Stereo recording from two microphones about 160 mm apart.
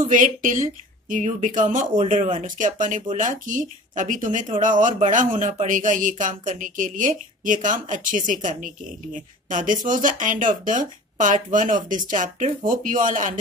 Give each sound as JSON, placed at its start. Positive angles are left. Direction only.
{"t": 0.0, "sound": "speech", "side_deg": -55}